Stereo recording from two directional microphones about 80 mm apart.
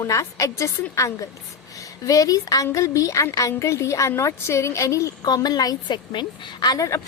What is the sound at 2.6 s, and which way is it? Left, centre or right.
A woman's voice, left.